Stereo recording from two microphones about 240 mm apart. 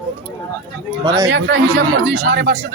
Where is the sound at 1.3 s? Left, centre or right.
Right.